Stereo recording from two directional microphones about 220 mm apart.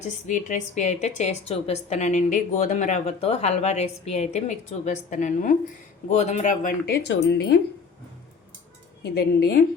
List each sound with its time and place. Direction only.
0.3 s a woman's voice: 35° left (ahead or behind)
9.1 s a woman's voice: 45° left (ahead or behind)